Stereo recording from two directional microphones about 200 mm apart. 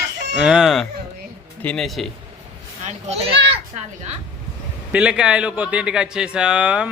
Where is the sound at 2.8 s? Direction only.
35° right (ahead or behind).